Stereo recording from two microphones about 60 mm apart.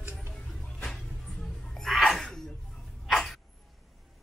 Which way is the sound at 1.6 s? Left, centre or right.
Centre.